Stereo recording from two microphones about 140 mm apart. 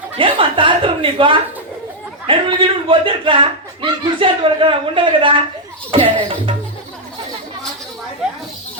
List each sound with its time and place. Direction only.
0.2 s a man's voice: 35° right (ahead or behind)
5.9 s chuckle: 40° right (ahead or behind)